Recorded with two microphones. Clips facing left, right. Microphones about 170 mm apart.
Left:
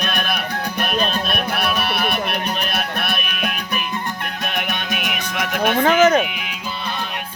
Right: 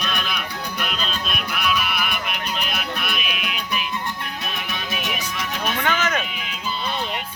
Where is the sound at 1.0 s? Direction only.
60° left (ahead or behind).